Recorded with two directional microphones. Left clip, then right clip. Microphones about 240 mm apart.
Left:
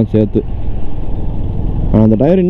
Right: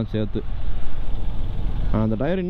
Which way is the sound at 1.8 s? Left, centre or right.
Right.